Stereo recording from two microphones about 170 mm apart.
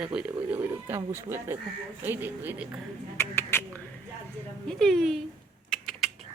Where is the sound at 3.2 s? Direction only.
15° left (ahead or behind).